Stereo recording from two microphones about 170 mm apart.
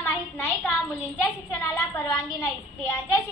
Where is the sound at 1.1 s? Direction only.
15° left (ahead or behind).